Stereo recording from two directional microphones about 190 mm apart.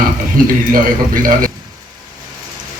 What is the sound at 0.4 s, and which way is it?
Speech, 45° right (ahead or behind).